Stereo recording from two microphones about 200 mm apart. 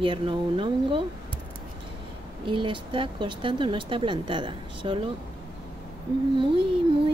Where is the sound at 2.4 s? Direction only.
25° right (ahead or behind).